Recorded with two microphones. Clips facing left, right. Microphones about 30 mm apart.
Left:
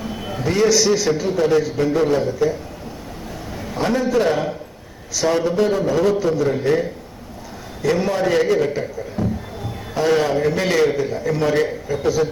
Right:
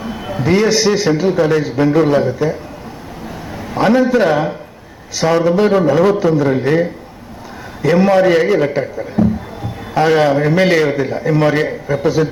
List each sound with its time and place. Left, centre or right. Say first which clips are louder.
0.0 s a sound: right 4 dB; centre
0.4 s a man's voice: right 3 dB; right
3.8 s a man's voice: right 7 dB; right
8.0 s a man's voice: right 8 dB; right
8.4 s a man's voice: right 4 dB; right